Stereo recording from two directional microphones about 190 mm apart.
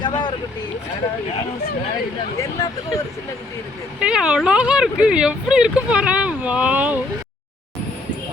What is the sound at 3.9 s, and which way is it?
Speech, 5° right (ahead or behind).